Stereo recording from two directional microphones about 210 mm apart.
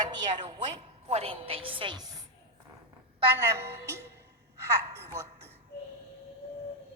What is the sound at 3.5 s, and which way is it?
A woman's voice, 15° right (ahead or behind).